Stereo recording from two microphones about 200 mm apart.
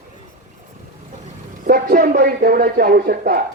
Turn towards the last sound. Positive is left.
turn(degrees=-45)  # may be behind; listen again after turning